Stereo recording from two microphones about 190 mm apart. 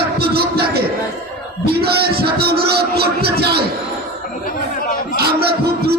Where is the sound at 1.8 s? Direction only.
55° right (ahead or behind).